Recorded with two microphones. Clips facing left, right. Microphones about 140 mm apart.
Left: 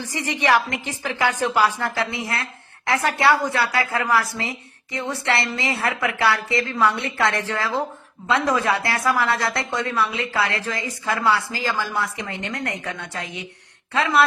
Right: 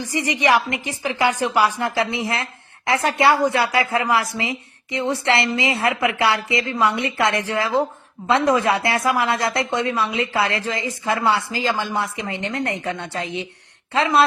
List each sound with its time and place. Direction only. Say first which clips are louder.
0.0 s a woman's voice: right 3 dB; 15° right (ahead or behind)